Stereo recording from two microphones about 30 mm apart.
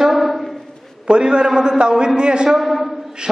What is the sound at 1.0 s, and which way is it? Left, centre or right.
A man's voice, right.